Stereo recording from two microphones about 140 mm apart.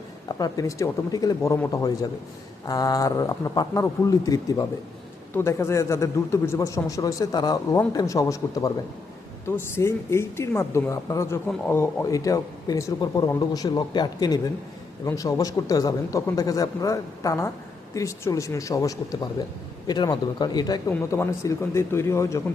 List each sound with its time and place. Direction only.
0.3 s speech: 30° left (ahead or behind)